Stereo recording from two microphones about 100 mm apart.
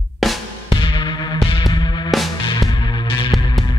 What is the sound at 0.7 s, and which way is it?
Music, 55° left (ahead or behind).